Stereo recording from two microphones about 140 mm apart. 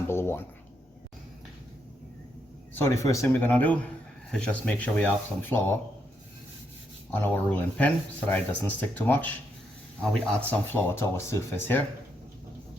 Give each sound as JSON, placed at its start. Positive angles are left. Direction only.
{"t": 0.1, "sound": "a sound", "side_deg": 15}
{"t": 2.7, "sound": "speech", "side_deg": 20}
{"t": 7.1, "sound": "speech", "side_deg": 10}